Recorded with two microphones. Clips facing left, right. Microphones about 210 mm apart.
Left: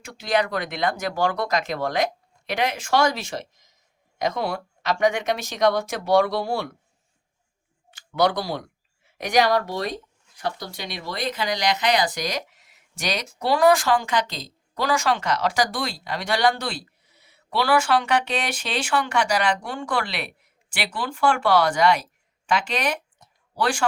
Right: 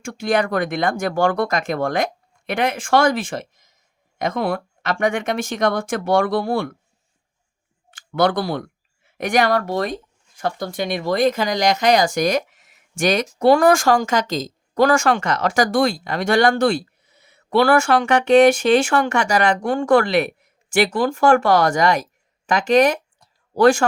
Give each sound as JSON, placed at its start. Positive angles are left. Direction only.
{"t": 0.0, "sound": "speech", "side_deg": -50}
{"t": 8.2, "sound": "speech", "side_deg": -55}